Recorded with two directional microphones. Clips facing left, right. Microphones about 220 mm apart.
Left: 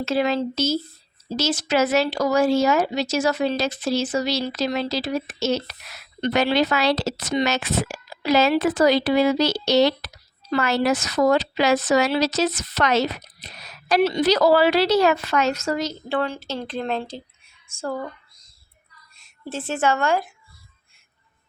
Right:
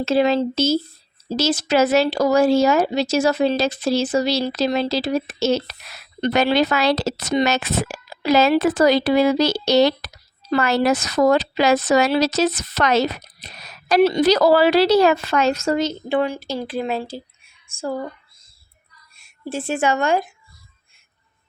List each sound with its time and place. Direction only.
0.0 s a woman's voice: 25° right (ahead or behind)
6.2 s a woman's voice: 45° right (ahead or behind); by 18.1 s 10° right (ahead or behind)
19.1 s speech: 10° right (ahead or behind)